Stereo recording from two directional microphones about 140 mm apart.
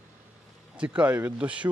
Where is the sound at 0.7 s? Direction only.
10° right (ahead or behind).